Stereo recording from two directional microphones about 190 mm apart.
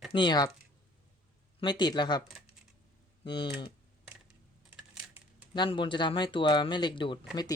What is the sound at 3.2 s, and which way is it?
Speech, 25° left (ahead or behind).